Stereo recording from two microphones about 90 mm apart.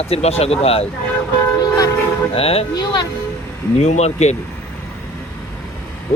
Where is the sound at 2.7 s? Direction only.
50° left (ahead or behind).